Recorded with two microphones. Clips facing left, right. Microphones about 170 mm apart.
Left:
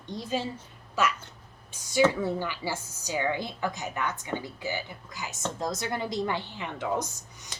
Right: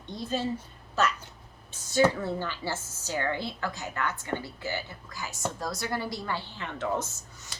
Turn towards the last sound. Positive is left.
turn(degrees=15)  # may be behind; listen again after turning